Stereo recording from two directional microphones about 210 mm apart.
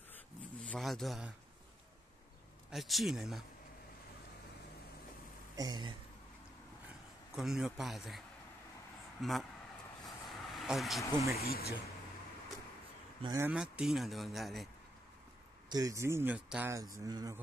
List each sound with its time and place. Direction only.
0.1 s a sound: 5° left (ahead or behind)
2.7 s speech: centre (ahead or behind)
5.6 s speech: 20° right (ahead or behind)
7.3 s speech: centre (ahead or behind)
9.2 s speech: centre (ahead or behind)
10.0 s vehicle: centre (ahead or behind)
11.3 s speech: 45° left (ahead or behind)
13.2 s speech: 20° right (ahead or behind)
13.5 s speech: 5° right (ahead or behind)
15.7 s speech: 15° right (ahead or behind)